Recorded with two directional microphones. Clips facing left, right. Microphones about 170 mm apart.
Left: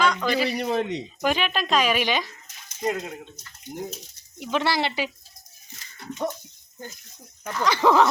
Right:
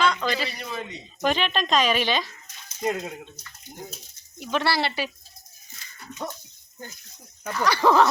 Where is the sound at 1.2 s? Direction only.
10° left (ahead or behind).